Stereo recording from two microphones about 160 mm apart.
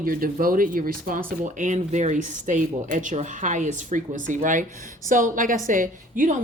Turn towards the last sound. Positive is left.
turn(degrees=-55)  # may be behind; listen again after turning